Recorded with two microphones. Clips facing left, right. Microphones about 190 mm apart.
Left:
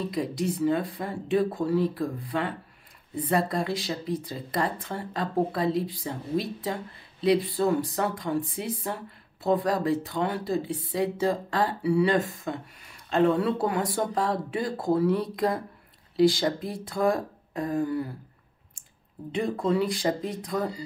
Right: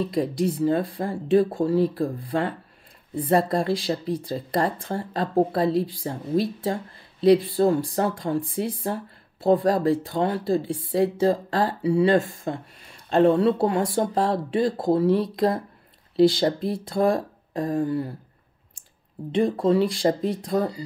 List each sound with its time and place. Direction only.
0.1 s speech: 30° right (ahead or behind)
19.5 s speech: 30° right (ahead or behind)